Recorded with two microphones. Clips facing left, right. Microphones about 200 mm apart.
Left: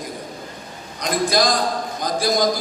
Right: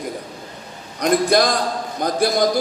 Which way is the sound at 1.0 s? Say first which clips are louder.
Right 4 dB; 60° right (ahead or behind).